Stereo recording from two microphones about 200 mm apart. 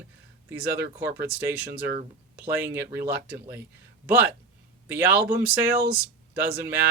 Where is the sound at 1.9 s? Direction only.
50° right (ahead or behind).